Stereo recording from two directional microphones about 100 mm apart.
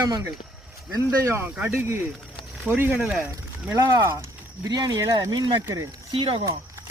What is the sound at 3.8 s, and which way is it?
Speech, 40° right (ahead or behind).